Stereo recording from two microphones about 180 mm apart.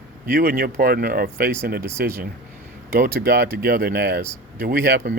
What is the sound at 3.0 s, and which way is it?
Speech, 55° right (ahead or behind).